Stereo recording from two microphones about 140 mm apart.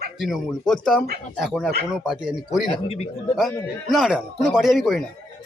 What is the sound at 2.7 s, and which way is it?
Speech, 45° left (ahead or behind).